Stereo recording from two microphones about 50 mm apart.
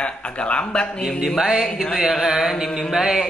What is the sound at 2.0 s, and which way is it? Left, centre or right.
Music, centre.